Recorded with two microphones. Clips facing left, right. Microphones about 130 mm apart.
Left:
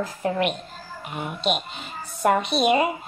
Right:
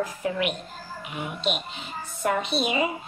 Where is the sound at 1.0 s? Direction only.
45° left (ahead or behind).